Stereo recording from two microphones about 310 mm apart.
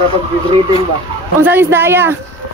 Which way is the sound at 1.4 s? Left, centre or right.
Centre.